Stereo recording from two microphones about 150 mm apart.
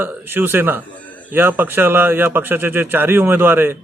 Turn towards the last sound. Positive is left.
turn(degrees=-15)  # may be behind; listen again after turning